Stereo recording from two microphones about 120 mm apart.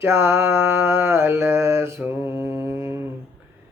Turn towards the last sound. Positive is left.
turn(degrees=-20)  # may be behind; listen again after turning